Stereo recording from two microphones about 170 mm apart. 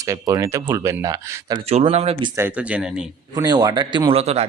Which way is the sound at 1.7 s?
35° right (ahead or behind).